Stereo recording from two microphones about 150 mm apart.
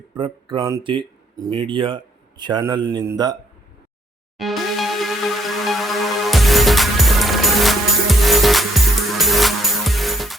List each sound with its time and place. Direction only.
0.1 s a man's voice: 30° right (ahead or behind)
4.4 s music: centre (ahead or behind)